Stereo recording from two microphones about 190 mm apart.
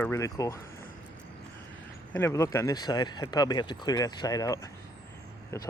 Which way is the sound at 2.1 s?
15° left (ahead or behind).